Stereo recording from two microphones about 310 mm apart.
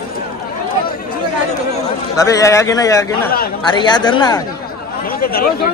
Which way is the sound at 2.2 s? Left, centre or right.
Centre.